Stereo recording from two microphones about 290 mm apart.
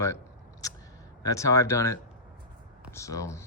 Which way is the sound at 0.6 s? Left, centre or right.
Centre.